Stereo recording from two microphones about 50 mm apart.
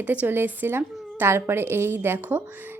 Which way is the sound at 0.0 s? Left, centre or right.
Right.